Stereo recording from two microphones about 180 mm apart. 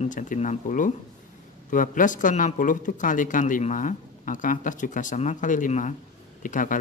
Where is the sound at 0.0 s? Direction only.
45° left (ahead or behind).